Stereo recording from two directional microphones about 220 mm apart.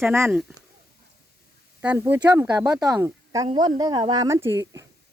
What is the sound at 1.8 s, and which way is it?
Speech, 10° right (ahead or behind).